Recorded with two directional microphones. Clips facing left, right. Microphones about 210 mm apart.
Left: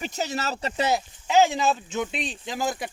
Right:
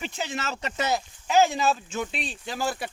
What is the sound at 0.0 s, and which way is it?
Speech, 40° left (ahead or behind).